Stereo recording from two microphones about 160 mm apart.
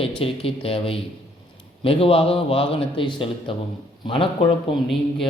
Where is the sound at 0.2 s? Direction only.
35° left (ahead or behind).